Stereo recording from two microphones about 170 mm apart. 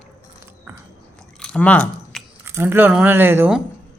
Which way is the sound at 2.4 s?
15° right (ahead or behind).